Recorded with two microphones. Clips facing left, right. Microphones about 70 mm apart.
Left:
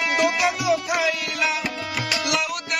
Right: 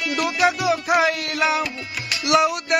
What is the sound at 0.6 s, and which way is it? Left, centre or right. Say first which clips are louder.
Music: right 3 dB; right.